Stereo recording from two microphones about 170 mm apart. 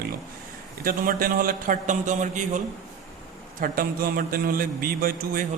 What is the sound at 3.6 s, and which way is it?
A man's voice, 55° right (ahead or behind).